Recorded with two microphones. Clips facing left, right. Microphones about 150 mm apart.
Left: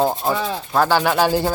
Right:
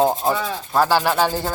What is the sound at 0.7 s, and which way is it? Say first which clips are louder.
Speech: left 1 dB; 5° right (ahead or behind).